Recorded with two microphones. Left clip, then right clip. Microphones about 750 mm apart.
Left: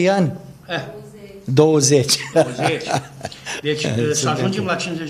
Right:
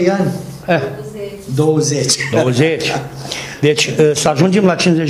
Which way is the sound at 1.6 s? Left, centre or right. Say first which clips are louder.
Left 1 dB; left.